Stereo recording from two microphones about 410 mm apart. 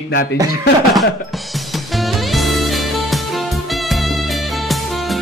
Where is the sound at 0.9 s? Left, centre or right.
Centre.